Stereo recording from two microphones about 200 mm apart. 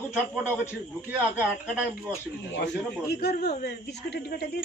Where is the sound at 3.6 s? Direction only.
55° left (ahead or behind).